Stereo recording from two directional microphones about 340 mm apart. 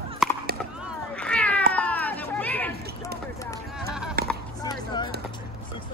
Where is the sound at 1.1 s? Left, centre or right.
Centre.